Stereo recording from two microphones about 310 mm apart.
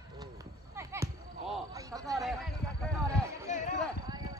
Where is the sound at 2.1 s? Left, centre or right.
Centre.